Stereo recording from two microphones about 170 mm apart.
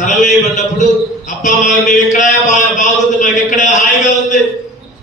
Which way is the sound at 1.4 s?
45° left (ahead or behind).